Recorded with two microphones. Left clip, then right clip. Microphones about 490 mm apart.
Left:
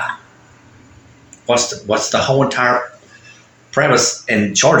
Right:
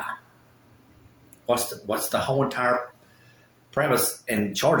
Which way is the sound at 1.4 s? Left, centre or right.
Right.